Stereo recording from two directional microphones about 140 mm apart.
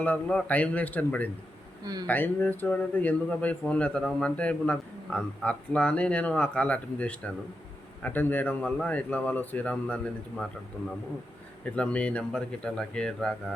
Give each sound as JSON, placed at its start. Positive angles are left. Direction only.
{"t": 0.0, "sound": "a man's voice", "side_deg": 10}
{"t": 1.8, "sound": "speech", "side_deg": -30}
{"t": 2.0, "sound": "a man's voice", "side_deg": 15}
{"t": 11.6, "sound": "a man's voice", "side_deg": 10}